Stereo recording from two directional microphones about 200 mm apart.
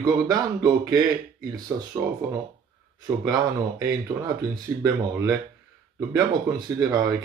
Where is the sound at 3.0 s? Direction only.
15° right (ahead or behind).